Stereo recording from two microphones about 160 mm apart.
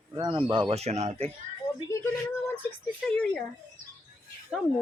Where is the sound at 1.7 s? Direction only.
20° left (ahead or behind).